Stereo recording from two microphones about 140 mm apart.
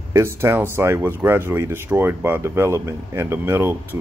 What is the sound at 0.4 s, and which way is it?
Speech, 20° right (ahead or behind).